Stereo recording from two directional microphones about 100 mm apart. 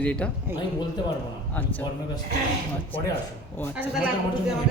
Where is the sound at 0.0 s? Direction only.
15° left (ahead or behind).